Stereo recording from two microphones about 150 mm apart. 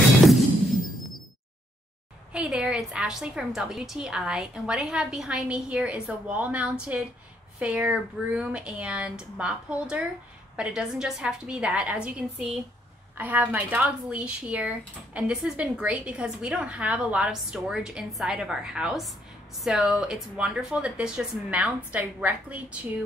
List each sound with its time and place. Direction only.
2.3 s a woman's voice: 5° right (ahead or behind)